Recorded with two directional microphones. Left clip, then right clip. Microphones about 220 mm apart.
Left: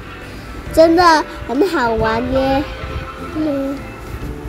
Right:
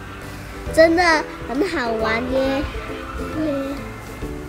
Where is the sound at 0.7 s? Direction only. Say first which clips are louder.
Left 4 dB; 15° left (ahead or behind).